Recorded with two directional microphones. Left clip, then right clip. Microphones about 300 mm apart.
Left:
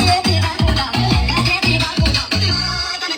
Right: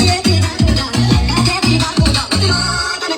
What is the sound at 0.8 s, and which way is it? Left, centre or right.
Music, centre.